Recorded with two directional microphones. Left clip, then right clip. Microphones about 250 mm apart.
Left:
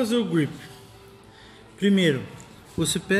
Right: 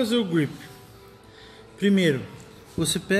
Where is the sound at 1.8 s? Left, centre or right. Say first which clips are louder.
Even; centre.